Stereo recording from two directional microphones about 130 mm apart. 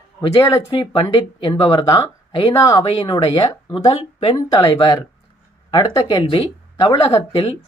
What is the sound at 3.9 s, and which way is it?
Speech, 50° left (ahead or behind).